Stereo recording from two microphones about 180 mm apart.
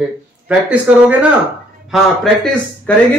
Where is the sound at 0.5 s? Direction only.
10° right (ahead or behind).